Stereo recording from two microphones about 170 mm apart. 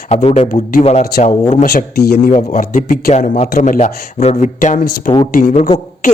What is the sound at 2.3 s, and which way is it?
A man's voice, 55° left (ahead or behind).